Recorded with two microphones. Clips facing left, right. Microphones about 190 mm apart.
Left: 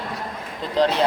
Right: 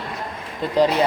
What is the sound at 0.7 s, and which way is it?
Speech, 10° right (ahead or behind).